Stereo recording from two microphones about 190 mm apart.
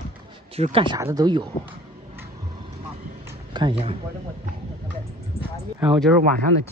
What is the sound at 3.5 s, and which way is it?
Speech, 25° right (ahead or behind).